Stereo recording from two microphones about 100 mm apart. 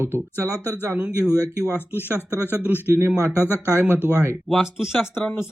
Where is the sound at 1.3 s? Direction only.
35° right (ahead or behind).